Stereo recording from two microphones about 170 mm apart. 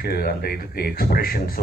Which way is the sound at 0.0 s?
65° left (ahead or behind).